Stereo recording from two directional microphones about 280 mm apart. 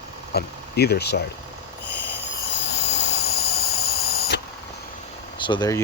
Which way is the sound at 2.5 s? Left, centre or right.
Left.